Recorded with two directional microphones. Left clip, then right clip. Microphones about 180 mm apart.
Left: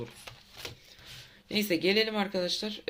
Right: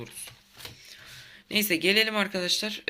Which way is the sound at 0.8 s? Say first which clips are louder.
Right 3 dB; centre (ahead or behind).